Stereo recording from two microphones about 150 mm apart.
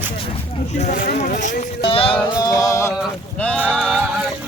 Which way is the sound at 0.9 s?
75° left (ahead or behind).